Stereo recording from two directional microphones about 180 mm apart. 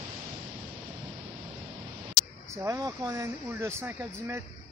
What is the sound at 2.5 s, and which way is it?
Speech, 20° right (ahead or behind).